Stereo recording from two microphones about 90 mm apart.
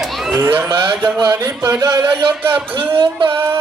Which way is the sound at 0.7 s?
55° right (ahead or behind).